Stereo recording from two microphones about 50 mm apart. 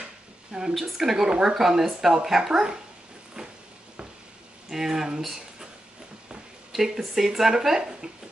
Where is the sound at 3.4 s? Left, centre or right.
Right.